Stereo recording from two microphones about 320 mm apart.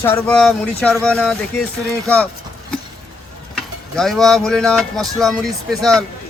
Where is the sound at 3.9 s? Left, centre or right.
Centre.